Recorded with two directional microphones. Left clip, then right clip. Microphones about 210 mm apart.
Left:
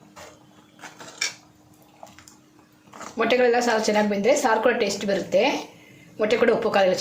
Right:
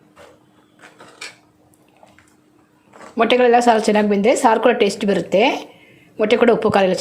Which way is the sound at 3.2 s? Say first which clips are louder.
Right 6 dB; 40° right (ahead or behind).